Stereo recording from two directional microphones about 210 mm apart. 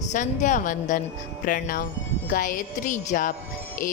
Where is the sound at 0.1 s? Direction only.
35° left (ahead or behind).